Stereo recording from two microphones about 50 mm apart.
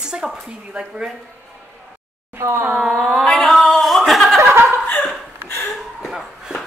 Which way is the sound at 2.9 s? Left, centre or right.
Centre.